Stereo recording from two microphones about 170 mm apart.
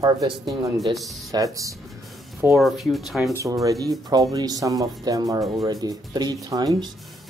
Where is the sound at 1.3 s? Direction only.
20° right (ahead or behind).